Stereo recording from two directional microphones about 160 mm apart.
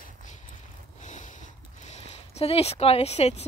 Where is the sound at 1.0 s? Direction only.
50° left (ahead or behind).